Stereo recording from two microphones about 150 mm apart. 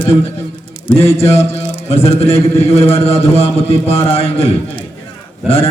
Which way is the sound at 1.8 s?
40° left (ahead or behind).